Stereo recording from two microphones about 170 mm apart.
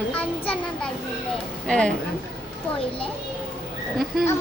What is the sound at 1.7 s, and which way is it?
Speech, 5° left (ahead or behind).